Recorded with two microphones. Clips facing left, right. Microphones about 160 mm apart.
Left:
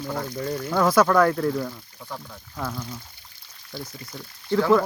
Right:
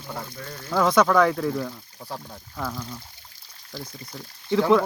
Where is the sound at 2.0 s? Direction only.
35° right (ahead or behind).